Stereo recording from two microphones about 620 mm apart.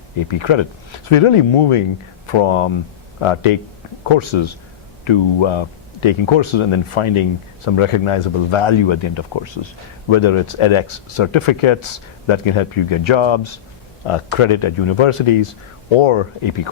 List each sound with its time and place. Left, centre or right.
0.3 s speech: left